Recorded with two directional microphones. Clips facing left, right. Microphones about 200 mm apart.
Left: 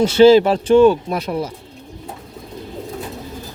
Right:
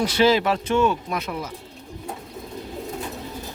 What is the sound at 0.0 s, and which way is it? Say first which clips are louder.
Speech: left 9 dB; 30° left (ahead or behind).